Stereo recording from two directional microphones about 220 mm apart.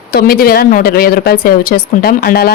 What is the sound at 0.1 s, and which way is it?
Speech, 40° left (ahead or behind).